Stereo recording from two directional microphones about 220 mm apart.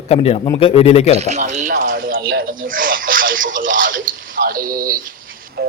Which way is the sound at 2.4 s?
40° right (ahead or behind).